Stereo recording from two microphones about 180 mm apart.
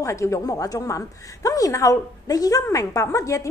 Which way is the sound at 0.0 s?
15° left (ahead or behind).